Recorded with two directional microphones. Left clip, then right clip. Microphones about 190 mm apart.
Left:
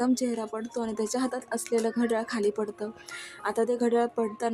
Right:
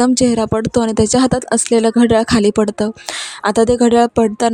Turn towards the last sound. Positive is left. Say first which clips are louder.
# right 14 dB
turn(degrees=-50)  # may be behind; listen again after turning